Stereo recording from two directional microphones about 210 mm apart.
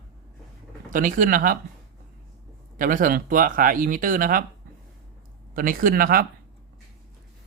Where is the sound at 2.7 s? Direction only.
40° right (ahead or behind).